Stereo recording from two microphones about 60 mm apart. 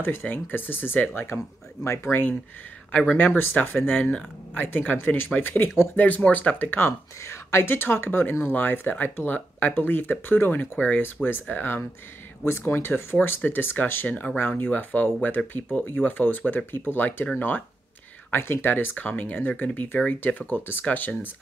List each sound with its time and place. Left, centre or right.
0.0 s speech: left
3.2 s speech: left
6.9 s speech: left
12.4 s speech: left
18.3 s speech: left